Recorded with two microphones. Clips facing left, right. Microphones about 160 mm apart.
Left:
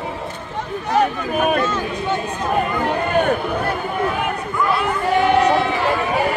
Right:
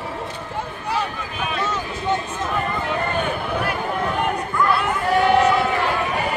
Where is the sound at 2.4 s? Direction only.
40° left (ahead or behind).